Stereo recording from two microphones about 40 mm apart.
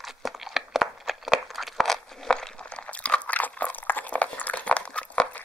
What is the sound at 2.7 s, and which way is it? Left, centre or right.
Crunch, left.